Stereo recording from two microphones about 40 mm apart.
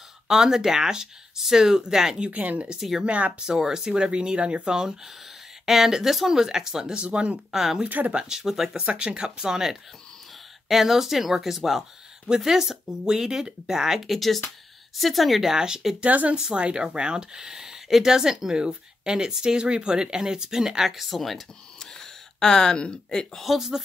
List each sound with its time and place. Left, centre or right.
0.3 s speech: centre
2.3 s speech: right
3.4 s speech: centre
8.7 s speech: right; by 15.5 s centre
15.5 s speech: centre
16.0 s speech: right
16.3 s speech: right; by 21.4 s centre
21.7 s a sound: centre
23.3 s speech: centre